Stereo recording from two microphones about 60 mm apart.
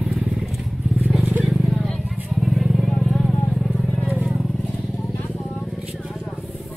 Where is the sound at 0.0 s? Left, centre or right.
Centre.